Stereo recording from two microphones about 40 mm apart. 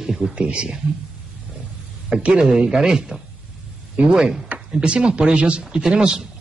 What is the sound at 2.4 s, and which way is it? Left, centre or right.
Speech, centre.